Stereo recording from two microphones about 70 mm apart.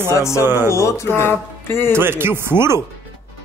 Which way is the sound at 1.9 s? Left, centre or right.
Right.